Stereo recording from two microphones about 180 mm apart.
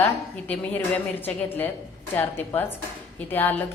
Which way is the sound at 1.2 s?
10° left (ahead or behind).